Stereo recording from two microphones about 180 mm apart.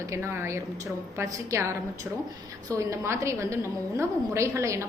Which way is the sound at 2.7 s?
15° right (ahead or behind).